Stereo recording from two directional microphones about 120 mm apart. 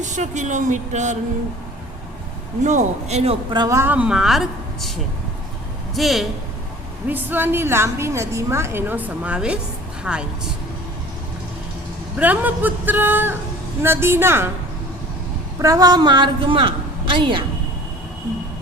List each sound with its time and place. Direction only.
0.0 s speech: 85° right
2.6 s a man's voice: 85° right; by 3.3 s 65° right (ahead or behind)
3.7 s a woman's voice: 25° right (ahead or behind)
3.9 s a woman's voice: 5° right (ahead or behind)
7.1 s a woman's voice: 15° right (ahead or behind)
12.1 s a woman's voice: 15° right (ahead or behind)
15.5 s a woman's voice: 25° right (ahead or behind); by 17.4 s 45° right (ahead or behind)